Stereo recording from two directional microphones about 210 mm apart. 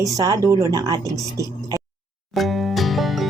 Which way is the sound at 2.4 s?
Centre (ahead or behind).